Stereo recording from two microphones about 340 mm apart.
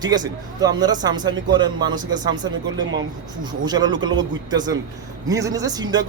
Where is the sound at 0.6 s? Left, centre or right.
Centre.